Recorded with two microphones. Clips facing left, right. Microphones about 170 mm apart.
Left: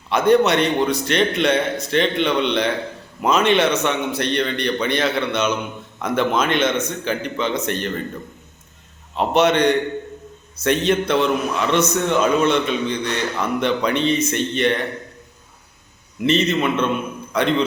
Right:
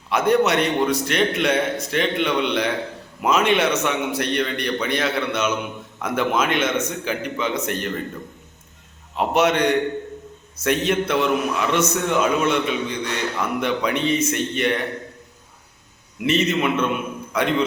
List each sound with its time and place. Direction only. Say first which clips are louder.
0.3 s a man's voice: left 3 dB; 5° right (ahead or behind)
0.6 s speech: left 1 dB; 30° left (ahead or behind)
1.0 s a man's voice: left 2 dB; 5° right (ahead or behind)
9.1 s a man's voice: left 2 dB; 5° right (ahead or behind)
16.2 s a man's voice: left 2 dB; 10° right (ahead or behind)